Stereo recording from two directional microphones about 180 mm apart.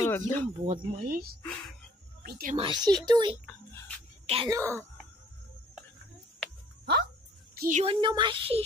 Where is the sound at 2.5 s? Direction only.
30° right (ahead or behind).